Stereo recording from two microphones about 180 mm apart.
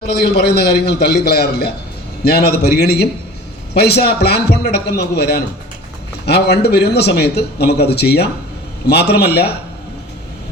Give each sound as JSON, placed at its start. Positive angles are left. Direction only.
{"t": 0.1, "sound": "a man's voice", "side_deg": 60}